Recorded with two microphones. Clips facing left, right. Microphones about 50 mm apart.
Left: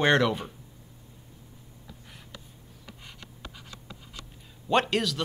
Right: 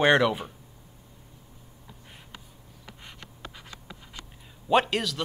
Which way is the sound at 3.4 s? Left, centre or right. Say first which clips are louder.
Right 2 dB; centre.